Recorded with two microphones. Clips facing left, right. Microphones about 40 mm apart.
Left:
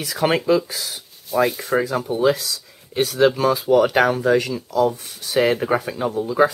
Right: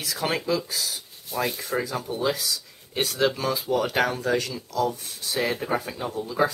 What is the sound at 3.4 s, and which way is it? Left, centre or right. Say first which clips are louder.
Speech: left 9 dB; left.